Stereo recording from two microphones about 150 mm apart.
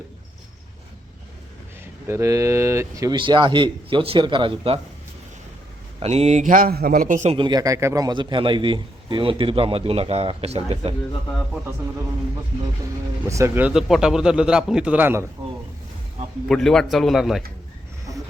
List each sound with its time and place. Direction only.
2.0 s speech: 20° right (ahead or behind)
3.2 s a man's voice: 35° right (ahead or behind)
6.0 s speech: 45° right (ahead or behind); by 7.3 s 65° right (ahead or behind)
7.3 s a man's voice: 30° right (ahead or behind)
13.2 s speech: 20° right (ahead or behind)
13.7 s a man's voice: 5° right (ahead or behind)
16.5 s a man's voice: 5° left (ahead or behind)